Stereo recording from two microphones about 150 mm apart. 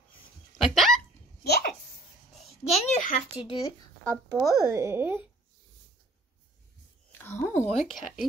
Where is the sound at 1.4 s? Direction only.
90° left.